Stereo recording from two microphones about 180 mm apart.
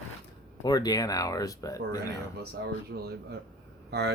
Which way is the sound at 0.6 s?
20° left (ahead or behind).